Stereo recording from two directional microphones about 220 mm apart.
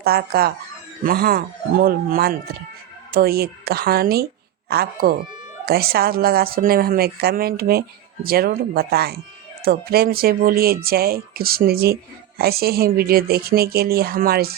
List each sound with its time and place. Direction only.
0.0 s a woman's voice: 45° right (ahead or behind)